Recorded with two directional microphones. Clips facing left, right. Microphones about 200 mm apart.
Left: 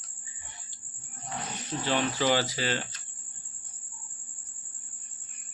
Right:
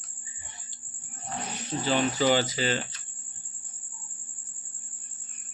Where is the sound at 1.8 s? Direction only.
Centre (ahead or behind).